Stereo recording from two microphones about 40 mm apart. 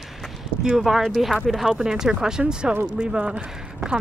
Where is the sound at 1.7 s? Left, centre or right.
Centre.